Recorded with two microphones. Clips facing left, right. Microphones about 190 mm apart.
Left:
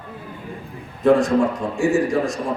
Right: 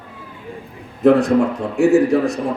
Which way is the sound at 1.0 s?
60° right (ahead or behind).